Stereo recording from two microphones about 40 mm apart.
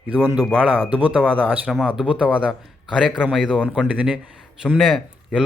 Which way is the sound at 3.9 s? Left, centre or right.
Right.